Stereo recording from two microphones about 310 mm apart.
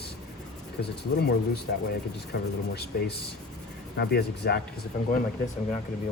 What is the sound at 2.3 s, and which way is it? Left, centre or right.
Speech, left.